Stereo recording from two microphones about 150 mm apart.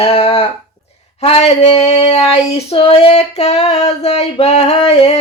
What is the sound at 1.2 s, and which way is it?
Female singing, 45° left (ahead or behind).